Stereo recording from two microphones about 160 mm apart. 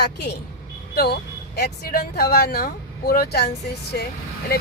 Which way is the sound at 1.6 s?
85° left.